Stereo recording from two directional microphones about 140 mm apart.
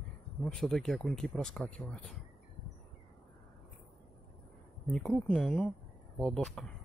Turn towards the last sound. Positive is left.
turn(degrees=5)  # may be behind; listen again after turning